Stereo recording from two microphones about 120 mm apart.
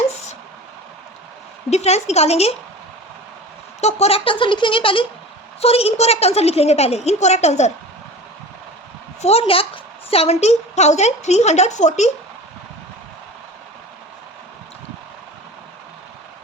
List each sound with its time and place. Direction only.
1.7 s a woman's voice: 65° left (ahead or behind)
3.8 s speech: 65° left (ahead or behind); by 5.0 s 45° left (ahead or behind)
5.5 s a woman's voice: 55° left (ahead or behind)
9.2 s a woman's voice: 55° left (ahead or behind); by 12.1 s 75° left (ahead or behind)